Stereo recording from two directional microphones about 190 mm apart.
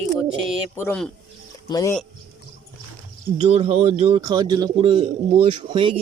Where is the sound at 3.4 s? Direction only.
35° right (ahead or behind).